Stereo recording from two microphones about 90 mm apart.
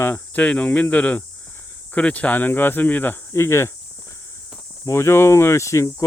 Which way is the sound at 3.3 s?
30° left (ahead or behind).